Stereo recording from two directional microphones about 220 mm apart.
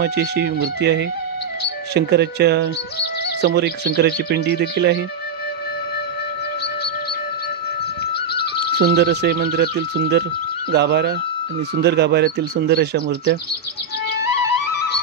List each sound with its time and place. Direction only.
0.0 s speech: 50° right (ahead or behind)
8.7 s speech: 50° right (ahead or behind)